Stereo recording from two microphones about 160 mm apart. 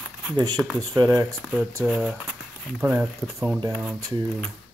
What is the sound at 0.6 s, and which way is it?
Speech, 5° right (ahead or behind).